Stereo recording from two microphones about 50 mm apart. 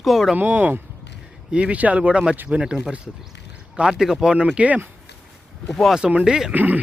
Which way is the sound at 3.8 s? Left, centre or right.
Centre.